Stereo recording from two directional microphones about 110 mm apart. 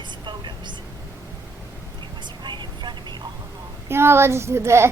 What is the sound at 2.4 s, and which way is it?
Vehicle, 45° right (ahead or behind).